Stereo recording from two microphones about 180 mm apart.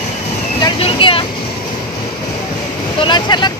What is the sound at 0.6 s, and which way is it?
Vehicle, 30° left (ahead or behind).